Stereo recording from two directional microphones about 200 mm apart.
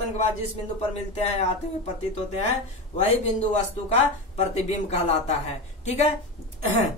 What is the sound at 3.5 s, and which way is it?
A woman's voice, 35° left (ahead or behind).